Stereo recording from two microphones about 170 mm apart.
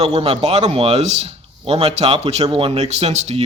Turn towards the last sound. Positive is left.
turn(degrees=-40)  # may be behind; listen again after turning